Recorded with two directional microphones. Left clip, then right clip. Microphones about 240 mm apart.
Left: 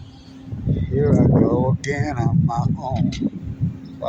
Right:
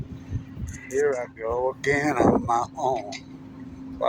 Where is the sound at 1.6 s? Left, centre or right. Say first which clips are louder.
Right 1 dB; centre.